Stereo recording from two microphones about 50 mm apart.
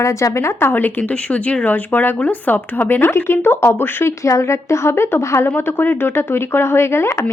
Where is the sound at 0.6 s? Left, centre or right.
Left.